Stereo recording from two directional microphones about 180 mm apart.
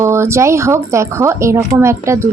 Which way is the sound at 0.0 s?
15° right (ahead or behind).